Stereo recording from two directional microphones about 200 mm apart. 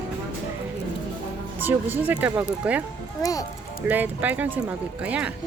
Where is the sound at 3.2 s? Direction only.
15° left (ahead or behind).